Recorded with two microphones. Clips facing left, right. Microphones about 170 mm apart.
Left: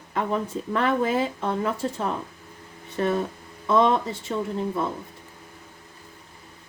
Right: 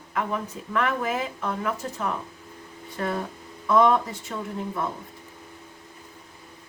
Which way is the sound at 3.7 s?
25° left (ahead or behind).